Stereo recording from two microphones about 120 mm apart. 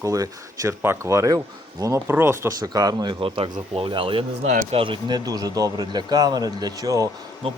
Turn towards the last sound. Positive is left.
turn(degrees=-50)  # may be behind; listen again after turning